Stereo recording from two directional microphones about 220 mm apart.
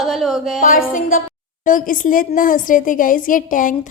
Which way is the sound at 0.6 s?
40° left (ahead or behind).